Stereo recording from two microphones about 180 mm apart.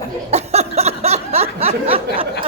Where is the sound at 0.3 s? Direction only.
40° right (ahead or behind).